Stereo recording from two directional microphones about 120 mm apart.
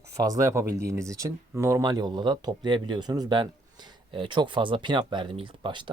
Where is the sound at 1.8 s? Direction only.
35° right (ahead or behind).